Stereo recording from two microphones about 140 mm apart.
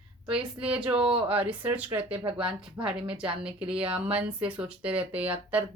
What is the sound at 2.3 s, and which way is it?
A woman's voice, 5° right (ahead or behind).